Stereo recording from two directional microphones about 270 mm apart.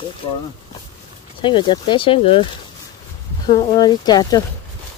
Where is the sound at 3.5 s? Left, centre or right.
Centre.